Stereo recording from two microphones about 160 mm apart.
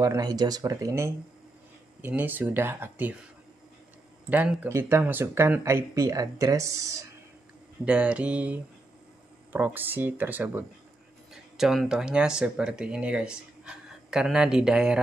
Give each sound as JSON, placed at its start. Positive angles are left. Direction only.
{"t": 0.0, "sound": "speech", "side_deg": -25}
{"t": 4.3, "sound": "speech", "side_deg": -10}
{"t": 7.8, "sound": "speech", "side_deg": -10}
{"t": 11.5, "sound": "speech", "side_deg": 0}